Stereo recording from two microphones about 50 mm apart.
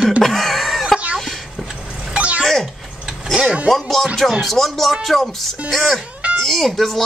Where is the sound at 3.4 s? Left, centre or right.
Right.